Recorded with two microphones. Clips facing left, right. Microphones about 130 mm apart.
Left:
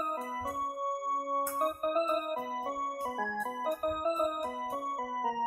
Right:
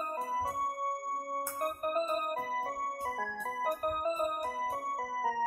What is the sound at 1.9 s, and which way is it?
Music, 40° right (ahead or behind).